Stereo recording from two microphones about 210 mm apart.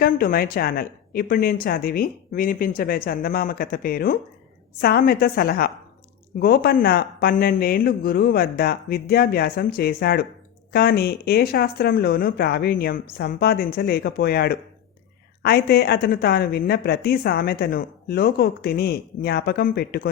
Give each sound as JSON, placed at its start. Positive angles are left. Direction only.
{"t": 0.0, "sound": "speech", "side_deg": 45}